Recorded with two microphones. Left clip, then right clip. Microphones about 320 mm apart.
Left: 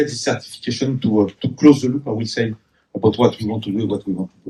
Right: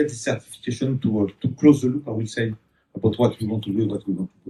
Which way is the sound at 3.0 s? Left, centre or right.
Left.